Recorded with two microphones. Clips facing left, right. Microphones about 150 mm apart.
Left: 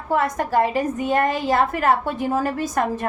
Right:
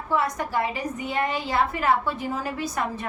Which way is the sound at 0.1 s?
50° left (ahead or behind).